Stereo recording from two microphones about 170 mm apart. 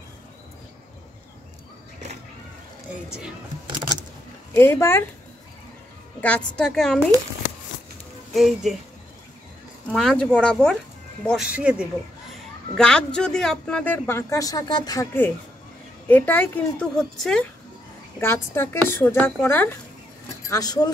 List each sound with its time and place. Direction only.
2.9 s a woman's voice: 5° right (ahead or behind)
4.6 s speech: 15° left (ahead or behind)
6.2 s a woman's voice: 5° left (ahead or behind)
8.3 s speech: centre (ahead or behind)
9.8 s a woman's voice: 5° left (ahead or behind)
12.7 s speech: 5° left (ahead or behind); by 15.0 s 25° left (ahead or behind)
16.1 s a woman's voice: 10° left (ahead or behind)
18.2 s speech: 15° left (ahead or behind)